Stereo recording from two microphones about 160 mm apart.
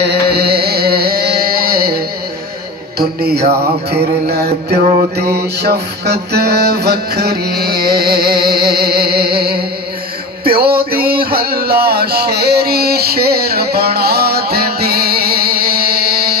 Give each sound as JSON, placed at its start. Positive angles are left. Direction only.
{"t": 0.0, "sound": "carnatic music", "side_deg": -85}
{"t": 3.0, "sound": "music", "side_deg": -75}
{"t": 5.2, "sound": "mantra", "side_deg": -20}
{"t": 5.6, "sound": "music", "side_deg": -90}
{"t": 10.6, "sound": "a sound", "side_deg": -70}